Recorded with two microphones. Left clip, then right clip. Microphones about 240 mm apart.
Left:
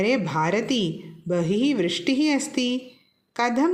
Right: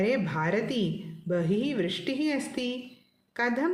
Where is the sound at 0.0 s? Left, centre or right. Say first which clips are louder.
Left 5 dB; left.